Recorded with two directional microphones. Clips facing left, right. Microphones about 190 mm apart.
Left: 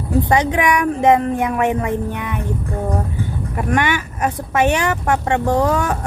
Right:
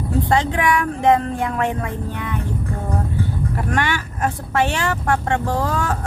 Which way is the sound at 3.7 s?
15° left (ahead or behind).